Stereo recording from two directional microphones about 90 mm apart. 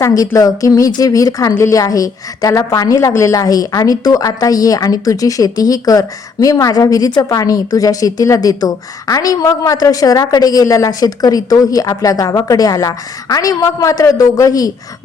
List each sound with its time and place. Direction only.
0.0 s a woman's voice: 40° left (ahead or behind)